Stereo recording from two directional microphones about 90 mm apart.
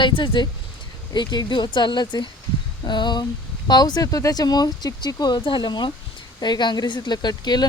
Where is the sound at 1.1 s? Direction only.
55° left (ahead or behind).